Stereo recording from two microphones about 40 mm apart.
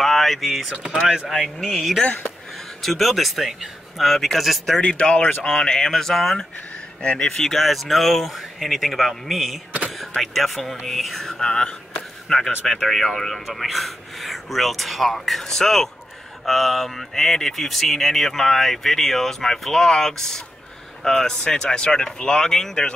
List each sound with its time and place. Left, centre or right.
0.0 s speech: centre
4.8 s speech: left
7.5 s speech: centre
11.2 s speech: centre